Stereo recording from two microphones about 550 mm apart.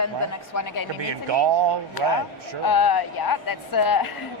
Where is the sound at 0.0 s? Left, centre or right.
Left.